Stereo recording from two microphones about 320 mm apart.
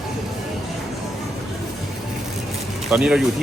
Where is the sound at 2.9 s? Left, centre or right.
Centre.